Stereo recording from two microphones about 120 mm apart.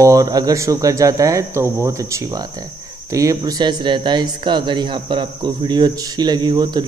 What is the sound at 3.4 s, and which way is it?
Speech, 35° right (ahead or behind).